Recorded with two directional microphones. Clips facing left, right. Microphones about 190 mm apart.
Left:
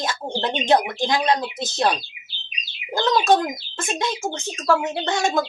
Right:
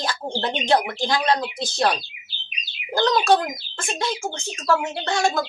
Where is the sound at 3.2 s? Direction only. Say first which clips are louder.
Left 1 dB; 20° left (ahead or behind).